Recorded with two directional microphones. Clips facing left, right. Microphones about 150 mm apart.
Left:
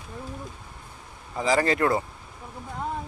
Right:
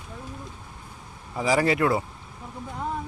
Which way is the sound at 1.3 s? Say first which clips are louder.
Right 1 dB; 10° right (ahead or behind).